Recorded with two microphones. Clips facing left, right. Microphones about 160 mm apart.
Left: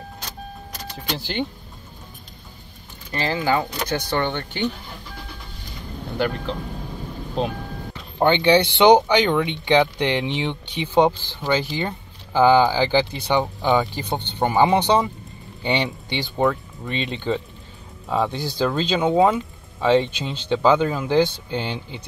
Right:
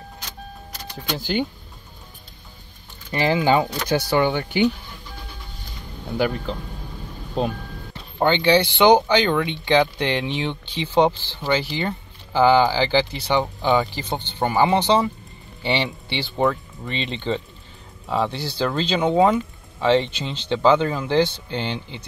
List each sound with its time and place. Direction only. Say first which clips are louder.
1.2 s speech: right 4 dB; 5° right (ahead or behind)
3.1 s speech: right 3 dB; 15° right (ahead or behind)
4.0 s speech: right 4 dB; 5° right (ahead or behind)
6.1 s speech: right 1 dB; 5° right (ahead or behind)
8.2 s speech: left 1 dB; 15° left (ahead or behind)
16.3 s speech: even; centre (ahead or behind)